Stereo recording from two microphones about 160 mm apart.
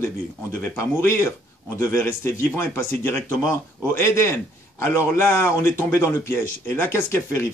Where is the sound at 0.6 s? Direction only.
15° left (ahead or behind).